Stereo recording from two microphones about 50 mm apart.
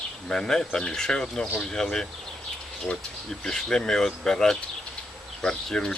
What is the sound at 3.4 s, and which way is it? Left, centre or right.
Speech, centre.